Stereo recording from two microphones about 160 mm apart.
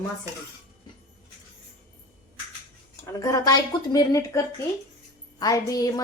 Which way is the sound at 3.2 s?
25° left (ahead or behind).